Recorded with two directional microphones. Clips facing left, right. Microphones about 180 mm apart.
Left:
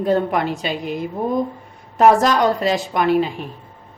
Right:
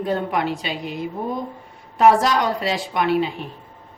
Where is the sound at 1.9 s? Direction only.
45° left (ahead or behind).